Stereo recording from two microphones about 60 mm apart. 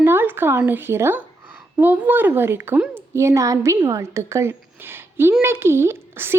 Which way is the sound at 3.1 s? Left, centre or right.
Right.